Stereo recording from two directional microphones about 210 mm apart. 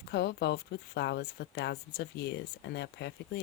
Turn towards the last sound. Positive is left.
turn(degrees=55)  # may be behind; listen again after turning